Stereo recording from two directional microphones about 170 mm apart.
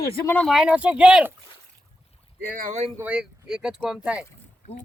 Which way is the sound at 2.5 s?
55° right (ahead or behind).